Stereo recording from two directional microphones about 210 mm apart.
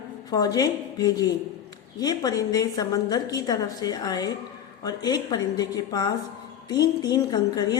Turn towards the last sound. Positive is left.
turn(degrees=20)  # may be behind; listen again after turning